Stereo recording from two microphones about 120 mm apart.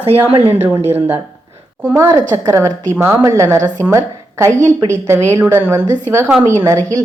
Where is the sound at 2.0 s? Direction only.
25° right (ahead or behind).